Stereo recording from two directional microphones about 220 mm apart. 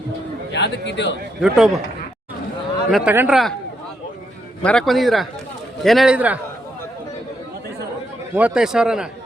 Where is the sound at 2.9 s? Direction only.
5° right (ahead or behind).